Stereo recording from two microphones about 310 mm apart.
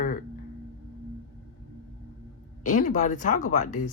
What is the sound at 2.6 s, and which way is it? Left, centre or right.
Speech, left.